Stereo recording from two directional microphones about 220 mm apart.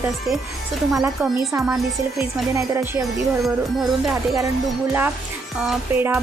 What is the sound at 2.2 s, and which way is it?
Speech, 10° right (ahead or behind).